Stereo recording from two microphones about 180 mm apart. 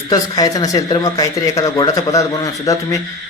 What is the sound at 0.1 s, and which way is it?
A man's voice, 20° left (ahead or behind).